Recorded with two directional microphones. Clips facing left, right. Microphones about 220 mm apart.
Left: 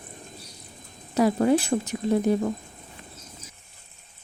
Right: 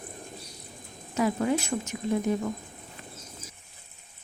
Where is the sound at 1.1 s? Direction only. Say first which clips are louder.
Left 5 dB; 35° left (ahead or behind).